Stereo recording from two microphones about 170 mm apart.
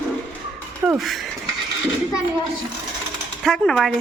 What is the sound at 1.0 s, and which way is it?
Speech, centre (ahead or behind).